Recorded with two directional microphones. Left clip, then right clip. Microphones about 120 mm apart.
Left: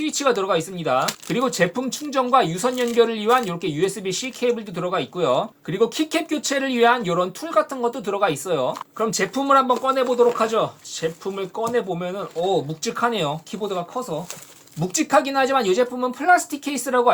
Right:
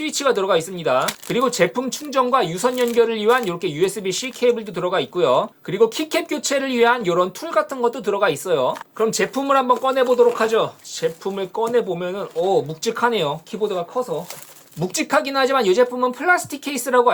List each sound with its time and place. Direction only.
0.0 s speech: 35° right (ahead or behind); by 14.0 s 15° right (ahead or behind)
14.8 s speech: 35° right (ahead or behind)